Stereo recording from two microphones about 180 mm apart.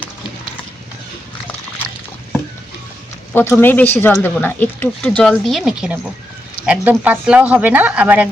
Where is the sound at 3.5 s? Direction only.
10° left (ahead or behind).